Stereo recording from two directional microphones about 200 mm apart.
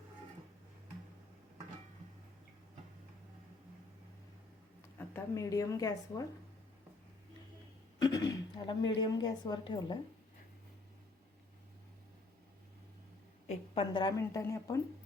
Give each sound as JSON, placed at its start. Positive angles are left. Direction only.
{"t": 4.9, "sound": "a woman's voice", "side_deg": 15}
{"t": 8.0, "sound": "a woman's voice", "side_deg": 20}
{"t": 13.5, "sound": "a woman's voice", "side_deg": 25}